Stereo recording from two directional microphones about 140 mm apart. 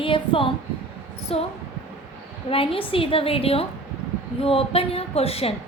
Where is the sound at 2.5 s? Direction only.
40° left (ahead or behind).